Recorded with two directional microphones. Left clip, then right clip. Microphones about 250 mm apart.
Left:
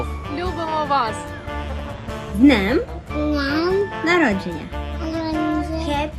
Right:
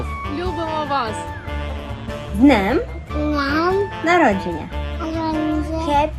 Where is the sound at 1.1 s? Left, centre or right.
Centre.